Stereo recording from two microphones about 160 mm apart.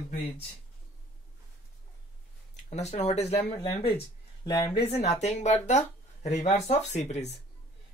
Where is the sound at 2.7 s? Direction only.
45° left (ahead or behind).